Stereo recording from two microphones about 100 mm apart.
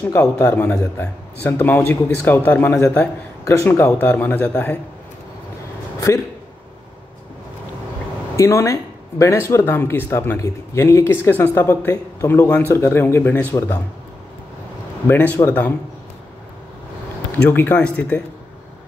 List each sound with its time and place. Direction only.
0.0 s speech: 25° left (ahead or behind)
3.4 s speech: 30° left (ahead or behind)
5.9 s a man's voice: 30° left (ahead or behind)
8.4 s speech: 30° left (ahead or behind)
12.4 s speech: 15° left (ahead or behind)
12.7 s speech: 25° left (ahead or behind)
15.0 s speech: 20° left (ahead or behind)
17.4 s speech: 20° left (ahead or behind)